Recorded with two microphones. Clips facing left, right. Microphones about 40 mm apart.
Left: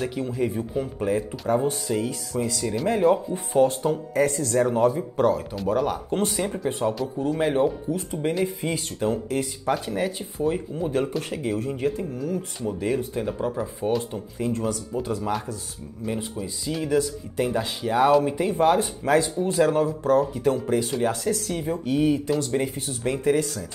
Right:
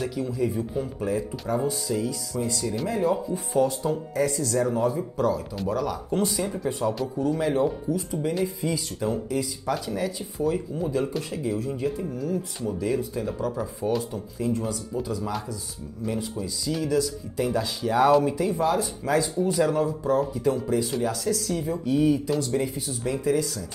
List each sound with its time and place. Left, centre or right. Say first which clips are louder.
0.1 s speech: left 1 dB; left
2.4 s speech: even; left
2.9 s speech: left 5 dB; left
7.9 s speech: left 1 dB; left
10.9 s speech: left 2 dB; left
14.4 s speech: left 1 dB; left
16.8 s speech: left 3 dB; left
18.4 s speech: left 3 dB; left
20.0 s speech: left 3 dB; left
21.0 s speech: left 2 dB; left